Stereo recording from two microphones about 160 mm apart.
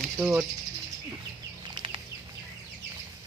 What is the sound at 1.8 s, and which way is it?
Bird flight, 30° right (ahead or behind).